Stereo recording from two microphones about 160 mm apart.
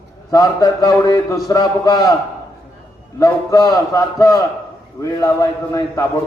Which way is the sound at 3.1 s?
20° left (ahead or behind).